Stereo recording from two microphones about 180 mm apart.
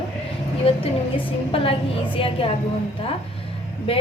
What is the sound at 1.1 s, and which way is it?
A woman's voice, 30° left (ahead or behind).